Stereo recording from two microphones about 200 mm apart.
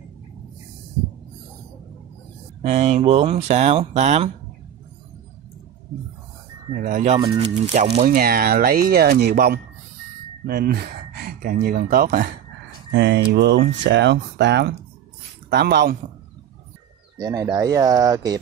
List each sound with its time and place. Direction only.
2.6 s speech: 35° right (ahead or behind)
6.8 s speech: 40° right (ahead or behind)
7.2 s speech: 30° right (ahead or behind)
8.0 s speech: 45° right (ahead or behind)
12.9 s speech: 60° right (ahead or behind)
17.2 s speech: 15° right (ahead or behind)